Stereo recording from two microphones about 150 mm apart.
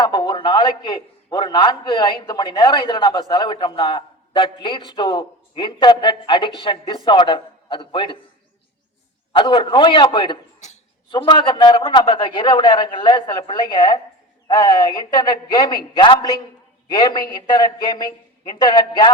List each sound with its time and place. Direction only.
0.0 s a man's voice: 30° left (ahead or behind)
9.3 s a man's voice: 35° left (ahead or behind)
10.6 s a sound: 50° left (ahead or behind)
11.1 s a man's voice: 30° left (ahead or behind)